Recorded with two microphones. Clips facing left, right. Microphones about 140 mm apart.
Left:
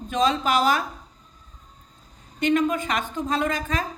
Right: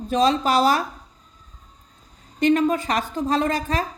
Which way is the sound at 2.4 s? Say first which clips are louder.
Right 3 dB; 35° right (ahead or behind).